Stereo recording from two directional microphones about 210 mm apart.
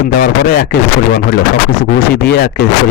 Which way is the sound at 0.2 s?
45° left (ahead or behind).